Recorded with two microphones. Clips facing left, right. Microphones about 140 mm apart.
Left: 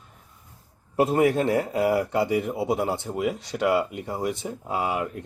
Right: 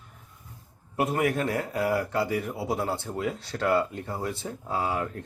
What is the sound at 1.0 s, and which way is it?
A man's voice, 25° left (ahead or behind).